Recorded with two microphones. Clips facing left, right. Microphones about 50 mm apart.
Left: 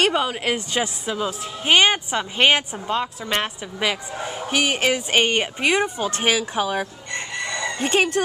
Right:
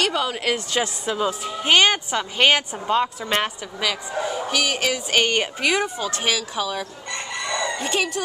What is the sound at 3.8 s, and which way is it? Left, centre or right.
A woman's voice, left.